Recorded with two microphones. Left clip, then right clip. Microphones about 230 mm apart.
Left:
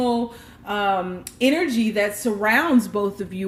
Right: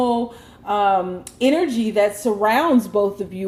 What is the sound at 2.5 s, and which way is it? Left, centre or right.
Speech, left.